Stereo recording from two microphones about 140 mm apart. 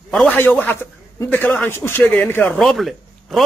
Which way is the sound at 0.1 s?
10° left (ahead or behind).